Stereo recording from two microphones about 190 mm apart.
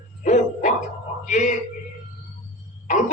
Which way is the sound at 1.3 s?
40° left (ahead or behind).